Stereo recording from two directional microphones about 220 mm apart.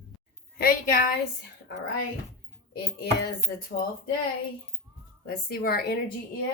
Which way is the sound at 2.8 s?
45° left (ahead or behind).